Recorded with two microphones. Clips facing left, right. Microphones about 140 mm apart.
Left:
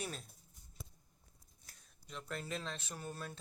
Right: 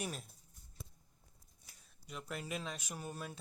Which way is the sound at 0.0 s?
5° right (ahead or behind).